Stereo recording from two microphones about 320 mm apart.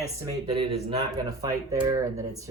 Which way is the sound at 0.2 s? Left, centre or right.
Centre.